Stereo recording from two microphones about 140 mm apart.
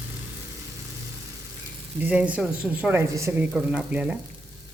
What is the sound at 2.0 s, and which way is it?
Speech, 10° right (ahead or behind).